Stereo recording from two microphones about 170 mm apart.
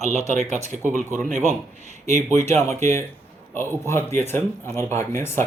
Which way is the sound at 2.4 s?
15° left (ahead or behind).